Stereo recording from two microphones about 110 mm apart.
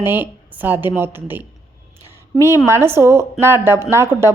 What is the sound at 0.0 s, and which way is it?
A woman's voice, 20° right (ahead or behind).